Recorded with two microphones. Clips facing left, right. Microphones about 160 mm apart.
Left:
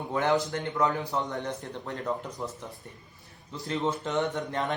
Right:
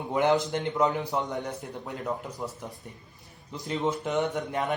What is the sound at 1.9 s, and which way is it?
Speech, centre (ahead or behind).